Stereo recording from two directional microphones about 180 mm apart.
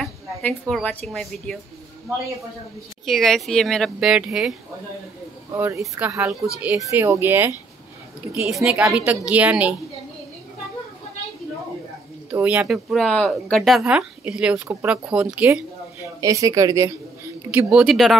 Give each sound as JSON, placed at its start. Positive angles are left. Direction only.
{"t": 0.0, "sound": "speech", "side_deg": 0}
{"t": 3.1, "sound": "speech", "side_deg": 0}
{"t": 5.5, "sound": "speech", "side_deg": -15}
{"t": 12.3, "sound": "speech", "side_deg": -10}